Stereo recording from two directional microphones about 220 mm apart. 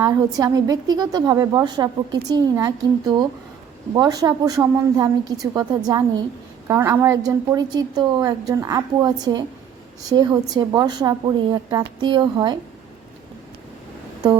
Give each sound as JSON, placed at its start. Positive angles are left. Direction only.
{"t": 0.0, "sound": "a woman's voice", "side_deg": -15}